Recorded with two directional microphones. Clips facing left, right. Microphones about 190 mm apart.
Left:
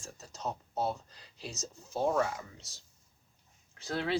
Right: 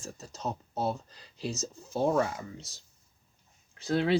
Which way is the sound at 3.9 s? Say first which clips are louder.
Right 6 dB; 20° right (ahead or behind).